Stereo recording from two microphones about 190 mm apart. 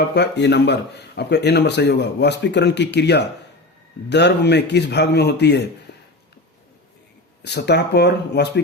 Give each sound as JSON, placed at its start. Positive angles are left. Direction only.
{"t": 0.1, "sound": "speech", "side_deg": 65}
{"t": 5.9, "sound": "a sound", "side_deg": 60}
{"t": 7.4, "sound": "speech", "side_deg": 60}